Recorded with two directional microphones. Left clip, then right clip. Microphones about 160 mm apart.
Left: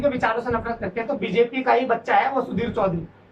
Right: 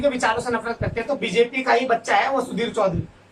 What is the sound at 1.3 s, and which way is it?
A man's voice, 20° right (ahead or behind).